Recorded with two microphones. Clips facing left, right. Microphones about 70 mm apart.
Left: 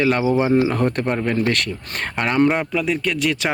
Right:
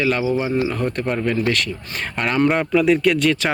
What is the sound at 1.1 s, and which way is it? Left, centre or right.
Speech, left.